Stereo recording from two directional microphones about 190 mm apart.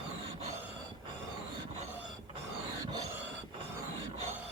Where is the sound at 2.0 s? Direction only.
30° right (ahead or behind).